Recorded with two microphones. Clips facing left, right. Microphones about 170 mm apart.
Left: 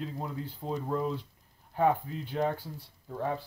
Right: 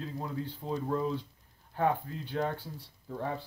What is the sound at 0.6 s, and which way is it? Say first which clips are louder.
Speech: left 1 dB; 20° left (ahead or behind).